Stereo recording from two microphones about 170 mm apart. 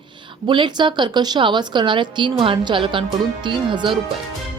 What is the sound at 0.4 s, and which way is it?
A woman's voice, 30° right (ahead or behind).